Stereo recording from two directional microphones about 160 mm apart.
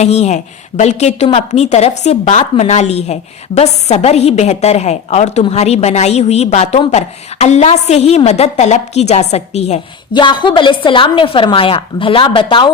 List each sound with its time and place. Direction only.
0.0 s a woman's voice: 45° left (ahead or behind)
10.1 s a woman's voice: 30° left (ahead or behind)